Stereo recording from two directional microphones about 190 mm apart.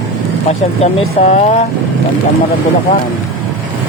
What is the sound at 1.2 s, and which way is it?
Speech, 35° left (ahead or behind).